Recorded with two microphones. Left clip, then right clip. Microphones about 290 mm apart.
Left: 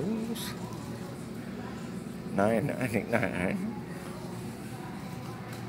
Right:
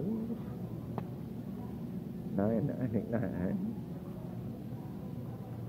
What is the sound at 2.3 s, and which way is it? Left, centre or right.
Speech, left.